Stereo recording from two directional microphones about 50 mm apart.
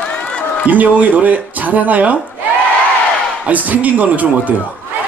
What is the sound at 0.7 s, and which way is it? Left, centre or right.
A man's voice, right.